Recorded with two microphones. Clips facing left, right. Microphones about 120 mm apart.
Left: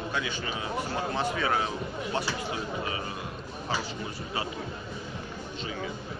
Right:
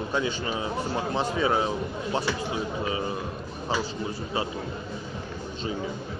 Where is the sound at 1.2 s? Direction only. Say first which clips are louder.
Right 4 dB; 20° right (ahead or behind).